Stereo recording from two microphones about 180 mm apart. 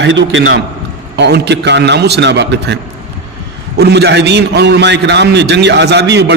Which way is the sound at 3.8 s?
65° right (ahead or behind).